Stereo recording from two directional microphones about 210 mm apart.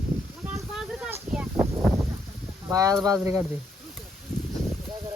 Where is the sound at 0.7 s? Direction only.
10° right (ahead or behind).